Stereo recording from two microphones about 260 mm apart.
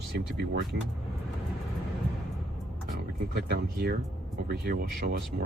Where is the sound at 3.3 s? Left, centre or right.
Right.